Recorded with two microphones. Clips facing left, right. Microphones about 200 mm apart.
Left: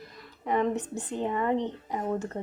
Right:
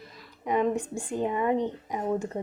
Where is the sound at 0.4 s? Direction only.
15° right (ahead or behind).